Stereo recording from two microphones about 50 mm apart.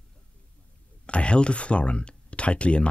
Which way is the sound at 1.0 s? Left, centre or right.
Left.